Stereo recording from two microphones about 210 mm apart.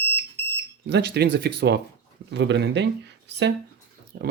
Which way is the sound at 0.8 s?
50° right (ahead or behind).